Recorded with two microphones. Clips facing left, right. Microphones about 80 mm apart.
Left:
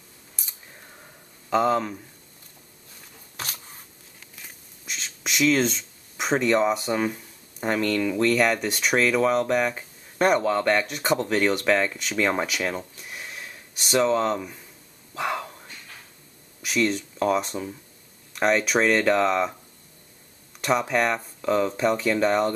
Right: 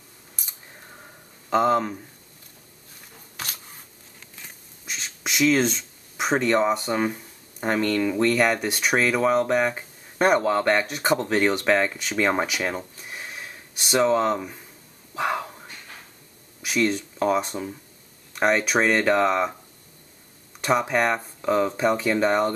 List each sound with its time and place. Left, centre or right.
1.5 s speech: centre
1.8 s speech: right
4.4 s a sound: centre
6.9 s speech: centre
9.7 s a sound: centre
10.4 s speech: centre
12.6 s a sound: centre
16.6 s speech: centre
20.6 s speech: centre